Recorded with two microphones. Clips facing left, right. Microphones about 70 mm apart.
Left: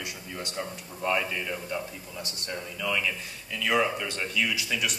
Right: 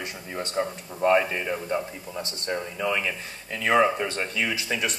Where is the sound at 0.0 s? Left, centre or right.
Right.